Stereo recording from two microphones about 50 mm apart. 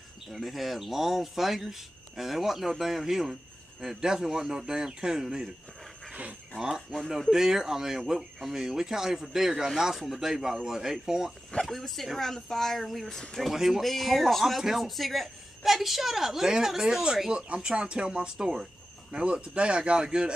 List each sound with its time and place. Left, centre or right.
0.3 s speech: centre
6.5 s speech: centre
11.6 s speech: centre
17.3 s speech: centre